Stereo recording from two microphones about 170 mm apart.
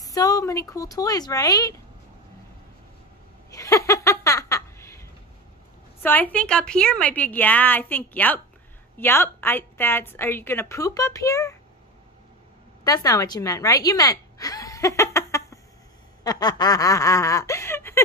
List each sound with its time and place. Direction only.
0.0 s speech: 20° left (ahead or behind)
3.5 s a sound: 20° left (ahead or behind)
6.0 s a woman's voice: 10° left (ahead or behind)
12.8 s a woman's voice: 20° left (ahead or behind)
16.3 s snicker: 25° left (ahead or behind)